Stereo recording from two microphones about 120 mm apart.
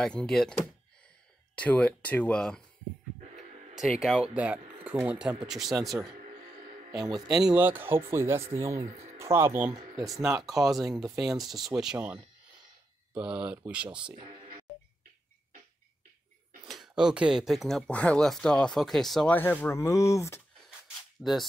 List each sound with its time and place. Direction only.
0.0 s speech: 5° left (ahead or behind)
4.0 s speech: centre (ahead or behind)
4.4 s speech: 15° right (ahead or behind)
6.9 s speech: 30° right (ahead or behind)
7.5 s speech: 15° right (ahead or behind)
9.8 s speech: 30° right (ahead or behind)
10.2 s speech: 5° right (ahead or behind)
13.1 s speech: 10° right (ahead or behind)
14.1 s speech: 45° right (ahead or behind)
16.6 s speech: centre (ahead or behind)
19.3 s speech: 15° left (ahead or behind)
21.2 s speech: centre (ahead or behind)